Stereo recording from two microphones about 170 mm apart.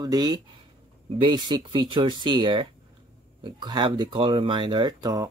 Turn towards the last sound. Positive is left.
turn(degrees=-25)  # may be behind; listen again after turning